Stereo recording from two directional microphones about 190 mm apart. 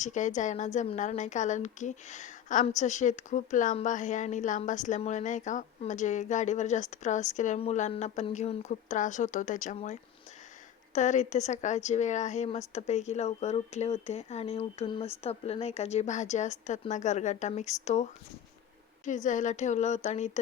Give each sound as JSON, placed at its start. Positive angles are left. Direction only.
{"t": 0.0, "sound": "a woman's voice", "side_deg": 40}